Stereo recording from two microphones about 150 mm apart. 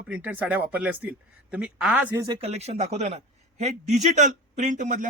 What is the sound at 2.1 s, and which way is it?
Speech, 20° right (ahead or behind).